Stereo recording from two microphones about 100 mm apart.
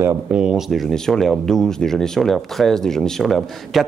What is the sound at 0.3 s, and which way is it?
Speech, 10° right (ahead or behind).